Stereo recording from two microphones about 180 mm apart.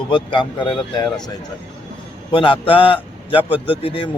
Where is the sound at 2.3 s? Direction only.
30° left (ahead or behind).